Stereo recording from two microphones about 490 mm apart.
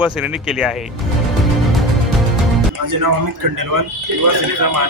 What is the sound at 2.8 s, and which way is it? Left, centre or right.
A man's voice, right.